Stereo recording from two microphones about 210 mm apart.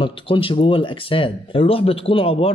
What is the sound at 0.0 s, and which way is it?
Speech, 25° left (ahead or behind).